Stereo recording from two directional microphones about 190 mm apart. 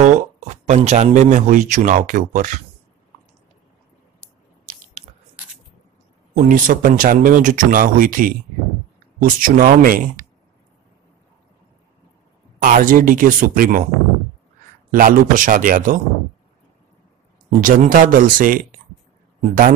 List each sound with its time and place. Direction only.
0.0 s speech: 35° right (ahead or behind)
6.3 s speech: 45° right (ahead or behind)
12.5 s speech: 45° right (ahead or behind)
14.9 s speech: 45° right (ahead or behind)
17.5 s speech: 45° right (ahead or behind)